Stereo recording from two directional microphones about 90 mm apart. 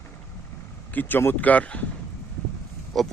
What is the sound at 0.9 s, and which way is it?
Speech, 20° left (ahead or behind).